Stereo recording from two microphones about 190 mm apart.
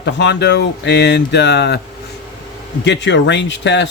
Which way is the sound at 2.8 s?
65° left (ahead or behind).